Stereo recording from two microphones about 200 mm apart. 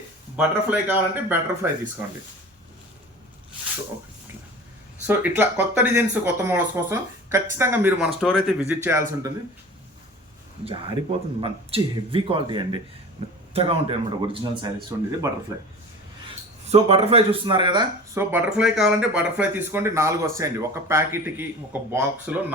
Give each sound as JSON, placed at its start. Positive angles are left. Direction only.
{"t": 0.3, "sound": "speech", "side_deg": -10}
{"t": 5.0, "sound": "speech", "side_deg": -10}
{"t": 8.2, "sound": "speech", "side_deg": 0}
{"t": 10.7, "sound": "speech", "side_deg": -25}
{"t": 16.6, "sound": "speech", "side_deg": -30}